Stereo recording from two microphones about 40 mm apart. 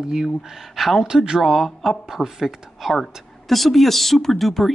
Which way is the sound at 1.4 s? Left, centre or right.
Centre.